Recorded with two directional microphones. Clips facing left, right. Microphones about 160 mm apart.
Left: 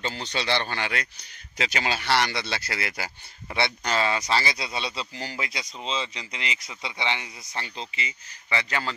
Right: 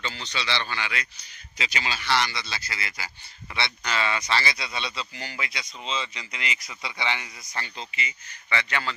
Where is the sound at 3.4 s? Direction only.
45° left (ahead or behind).